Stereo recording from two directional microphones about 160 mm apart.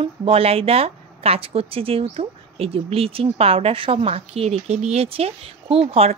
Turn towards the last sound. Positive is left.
turn(degrees=-40)  # may be behind; listen again after turning